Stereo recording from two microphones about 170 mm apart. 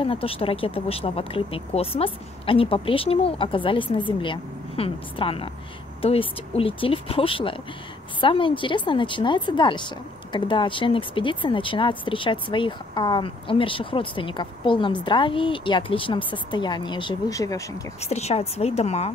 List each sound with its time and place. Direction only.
0.0 s a woman's voice: 35° left (ahead or behind)
18.0 s speech: 40° left (ahead or behind)